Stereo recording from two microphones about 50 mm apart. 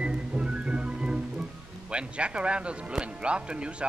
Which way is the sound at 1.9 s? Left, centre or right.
Right.